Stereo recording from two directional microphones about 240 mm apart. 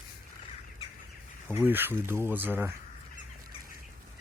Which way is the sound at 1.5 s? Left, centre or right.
Centre.